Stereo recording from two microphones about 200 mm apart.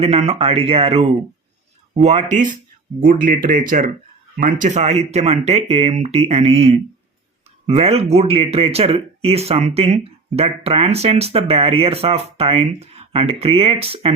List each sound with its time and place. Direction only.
0.0 s speech: 30° right (ahead or behind)